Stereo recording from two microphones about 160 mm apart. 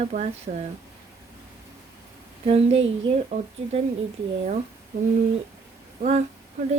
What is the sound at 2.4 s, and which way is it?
Speech, 35° right (ahead or behind).